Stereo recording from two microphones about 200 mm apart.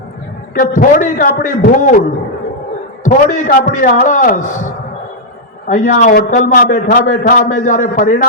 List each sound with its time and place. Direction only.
0.6 s a man's voice: 40° left (ahead or behind)
5.6 s a man's voice: 40° left (ahead or behind)